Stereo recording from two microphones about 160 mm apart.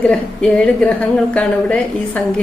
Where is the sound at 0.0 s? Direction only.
5° left (ahead or behind).